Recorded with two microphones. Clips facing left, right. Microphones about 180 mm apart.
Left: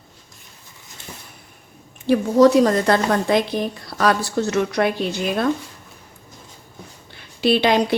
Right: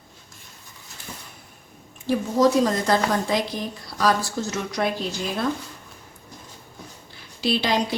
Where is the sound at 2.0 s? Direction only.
65° left (ahead or behind).